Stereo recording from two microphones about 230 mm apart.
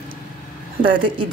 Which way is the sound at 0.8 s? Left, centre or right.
Right.